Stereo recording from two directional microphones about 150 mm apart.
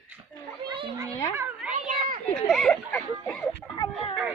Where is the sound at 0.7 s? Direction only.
35° right (ahead or behind).